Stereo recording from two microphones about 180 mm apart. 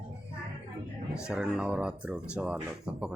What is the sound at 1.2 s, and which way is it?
Speech, 5° right (ahead or behind).